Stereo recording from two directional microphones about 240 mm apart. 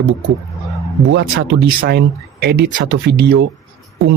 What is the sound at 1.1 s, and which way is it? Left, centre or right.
Speech, right.